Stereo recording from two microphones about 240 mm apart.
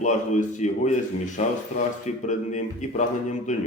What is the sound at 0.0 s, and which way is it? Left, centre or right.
Speech, left.